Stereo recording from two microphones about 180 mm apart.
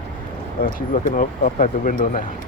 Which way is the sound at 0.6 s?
50° left (ahead or behind).